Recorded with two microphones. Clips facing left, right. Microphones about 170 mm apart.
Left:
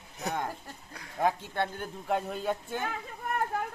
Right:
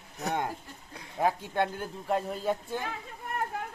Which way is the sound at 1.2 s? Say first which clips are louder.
Right 1 dB; 5° right (ahead or behind).